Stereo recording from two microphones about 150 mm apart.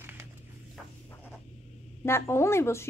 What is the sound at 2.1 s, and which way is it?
Speech, 20° left (ahead or behind).